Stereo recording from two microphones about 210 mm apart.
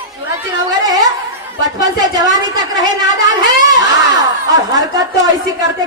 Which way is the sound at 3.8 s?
15° right (ahead or behind).